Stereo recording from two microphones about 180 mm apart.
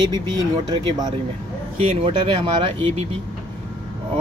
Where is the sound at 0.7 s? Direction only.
25° right (ahead or behind).